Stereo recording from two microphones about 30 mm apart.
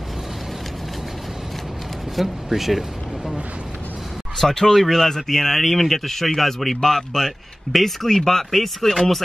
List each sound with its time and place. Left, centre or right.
2.1 s speech: centre
4.4 s speech: centre
5.6 s speech: centre